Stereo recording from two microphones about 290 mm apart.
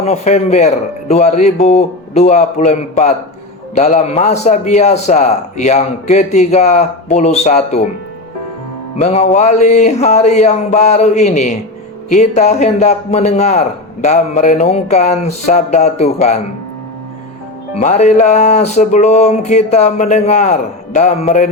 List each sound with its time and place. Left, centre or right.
0.0 s a man's voice: left
9.0 s a man's voice: left
17.7 s a man's voice: left